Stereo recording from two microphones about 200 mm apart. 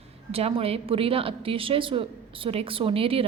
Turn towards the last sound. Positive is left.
turn(degrees=-30)  # may be behind; listen again after turning